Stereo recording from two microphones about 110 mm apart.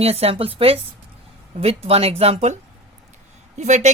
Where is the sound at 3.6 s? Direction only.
90° right.